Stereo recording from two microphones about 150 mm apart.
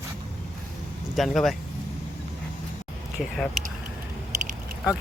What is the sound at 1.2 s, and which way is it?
Speech, centre (ahead or behind).